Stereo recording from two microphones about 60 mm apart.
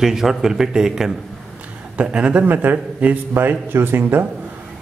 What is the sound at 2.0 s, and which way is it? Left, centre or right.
Speech, right.